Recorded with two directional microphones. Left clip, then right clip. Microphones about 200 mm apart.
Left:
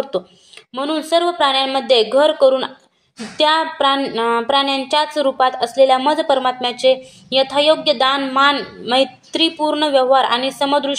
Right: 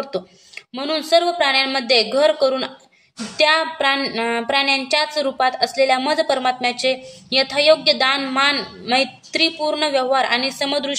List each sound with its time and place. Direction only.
0.7 s a woman's voice: 5° left (ahead or behind)